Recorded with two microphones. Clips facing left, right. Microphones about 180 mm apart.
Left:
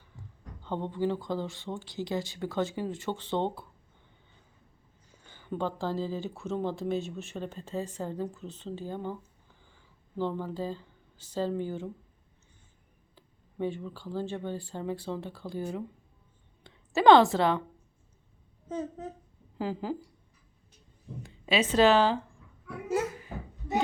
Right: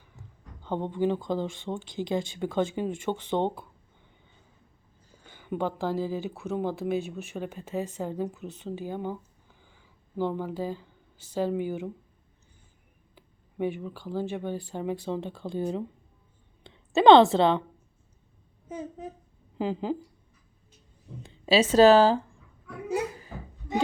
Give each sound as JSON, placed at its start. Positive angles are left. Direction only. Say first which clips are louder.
{"t": 0.6, "sound": "speech", "louder": "right 3 dB", "side_deg": -15}
{"t": 5.2, "sound": "speech", "louder": "right 3 dB", "side_deg": -15}
{"t": 13.1, "sound": "a woman's voice", "louder": "right 3 dB", "side_deg": -15}
{"t": 18.7, "sound": "a woman's voice", "louder": "left 2 dB", "side_deg": -10}
{"t": 21.2, "sound": "speech", "louder": "right 5 dB", "side_deg": -30}